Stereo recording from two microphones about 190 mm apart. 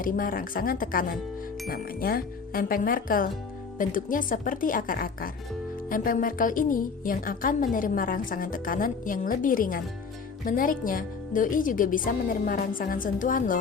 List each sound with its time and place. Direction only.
0.0 s a woman's voice: 45° left (ahead or behind)